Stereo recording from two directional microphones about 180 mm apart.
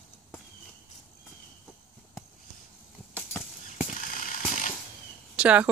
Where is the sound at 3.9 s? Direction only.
50° left (ahead or behind).